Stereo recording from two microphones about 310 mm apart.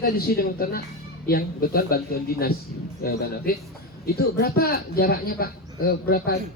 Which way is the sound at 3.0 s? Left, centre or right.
Left.